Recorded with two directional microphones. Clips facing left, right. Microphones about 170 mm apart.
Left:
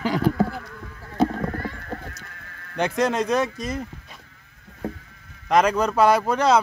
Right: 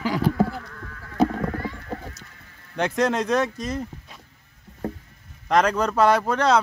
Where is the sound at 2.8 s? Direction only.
Centre (ahead or behind).